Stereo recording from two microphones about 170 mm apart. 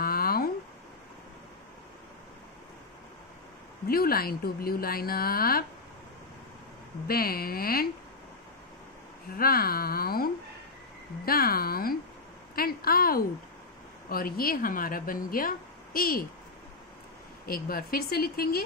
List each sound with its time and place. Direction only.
0.0 s a sound: 60° left (ahead or behind)
3.8 s a woman's voice: 60° left (ahead or behind)
7.1 s a woman's voice: 60° left (ahead or behind)
9.4 s a woman's voice: 60° left (ahead or behind)
17.5 s a woman's voice: 60° left (ahead or behind)